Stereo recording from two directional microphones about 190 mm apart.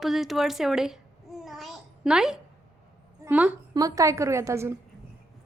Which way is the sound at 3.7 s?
20° right (ahead or behind).